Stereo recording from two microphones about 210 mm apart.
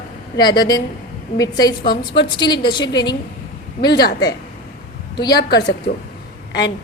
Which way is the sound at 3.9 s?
50° left (ahead or behind).